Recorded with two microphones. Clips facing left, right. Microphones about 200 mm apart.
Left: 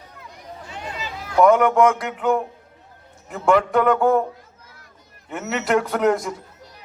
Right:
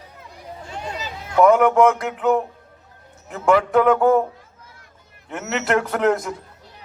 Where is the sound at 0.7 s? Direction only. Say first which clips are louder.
Right 2 dB; 40° right (ahead or behind).